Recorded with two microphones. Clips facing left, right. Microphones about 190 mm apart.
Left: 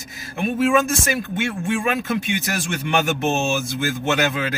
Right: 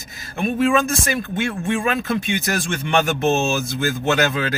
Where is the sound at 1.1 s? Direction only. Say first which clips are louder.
Right 1 dB; 5° left (ahead or behind).